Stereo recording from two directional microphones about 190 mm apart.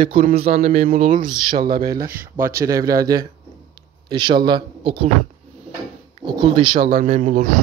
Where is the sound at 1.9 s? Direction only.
15° right (ahead or behind).